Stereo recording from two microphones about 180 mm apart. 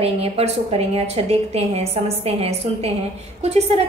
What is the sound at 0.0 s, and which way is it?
A woman's voice, 35° right (ahead or behind).